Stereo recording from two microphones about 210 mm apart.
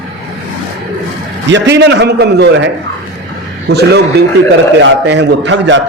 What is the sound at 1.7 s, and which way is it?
Speech, 55° right (ahead or behind).